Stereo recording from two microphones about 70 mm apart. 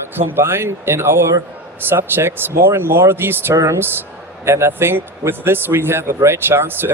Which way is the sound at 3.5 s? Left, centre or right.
Right.